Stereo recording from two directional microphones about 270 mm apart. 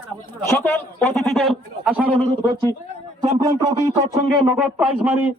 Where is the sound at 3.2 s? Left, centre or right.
Right.